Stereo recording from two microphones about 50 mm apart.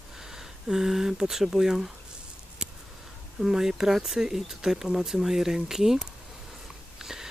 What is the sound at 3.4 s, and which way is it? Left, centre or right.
Speech, centre.